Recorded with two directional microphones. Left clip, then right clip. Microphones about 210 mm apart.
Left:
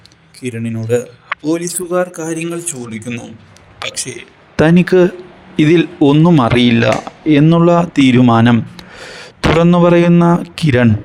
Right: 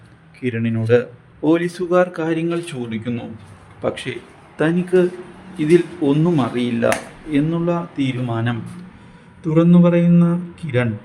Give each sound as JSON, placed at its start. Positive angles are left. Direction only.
{"t": 0.5, "sound": "speech", "side_deg": 0}
{"t": 3.8, "sound": "speech", "side_deg": 50}